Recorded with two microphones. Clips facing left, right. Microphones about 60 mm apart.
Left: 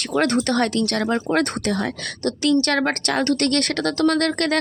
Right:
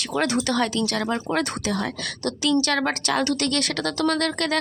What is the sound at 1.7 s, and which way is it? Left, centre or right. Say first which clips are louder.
A woman's voice: left 2 dB; left.